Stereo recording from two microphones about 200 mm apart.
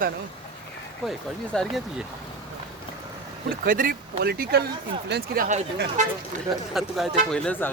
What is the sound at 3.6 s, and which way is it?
Speech, 45° right (ahead or behind).